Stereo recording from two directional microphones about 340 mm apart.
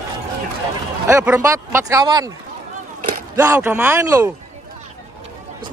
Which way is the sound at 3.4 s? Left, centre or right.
Centre.